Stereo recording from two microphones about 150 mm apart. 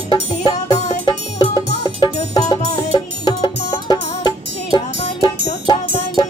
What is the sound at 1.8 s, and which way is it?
Music, 25° left (ahead or behind).